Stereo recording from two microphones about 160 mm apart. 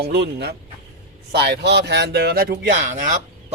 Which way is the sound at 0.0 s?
90° right.